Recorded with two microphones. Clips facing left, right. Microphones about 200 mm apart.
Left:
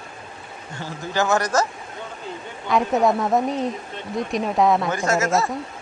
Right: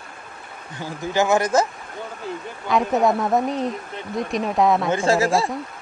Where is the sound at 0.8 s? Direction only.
15° right (ahead or behind).